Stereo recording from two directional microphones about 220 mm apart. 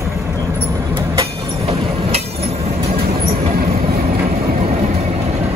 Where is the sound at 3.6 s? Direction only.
40° right (ahead or behind).